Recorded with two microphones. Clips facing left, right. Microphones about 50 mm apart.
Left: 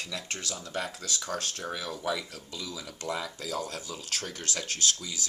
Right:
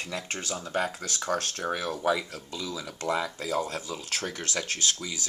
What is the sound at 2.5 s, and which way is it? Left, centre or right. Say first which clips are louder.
Speech: right 4 dB; right.